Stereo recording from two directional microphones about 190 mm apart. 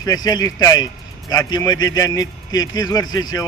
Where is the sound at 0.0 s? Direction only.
20° left (ahead or behind).